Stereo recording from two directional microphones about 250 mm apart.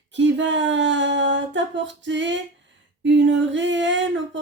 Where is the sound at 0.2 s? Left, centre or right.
Right.